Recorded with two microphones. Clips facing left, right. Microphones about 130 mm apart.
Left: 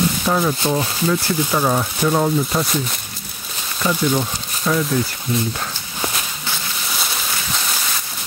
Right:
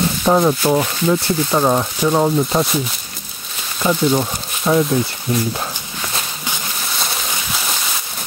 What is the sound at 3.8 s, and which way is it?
Speech, 20° right (ahead or behind).